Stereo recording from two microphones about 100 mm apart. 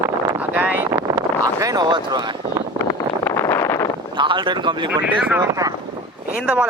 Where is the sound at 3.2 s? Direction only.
25° left (ahead or behind).